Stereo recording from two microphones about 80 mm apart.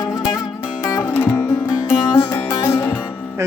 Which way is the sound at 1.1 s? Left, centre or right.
Left.